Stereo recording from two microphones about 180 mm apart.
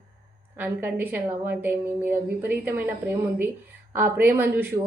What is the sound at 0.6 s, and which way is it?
A woman's voice, 10° right (ahead or behind).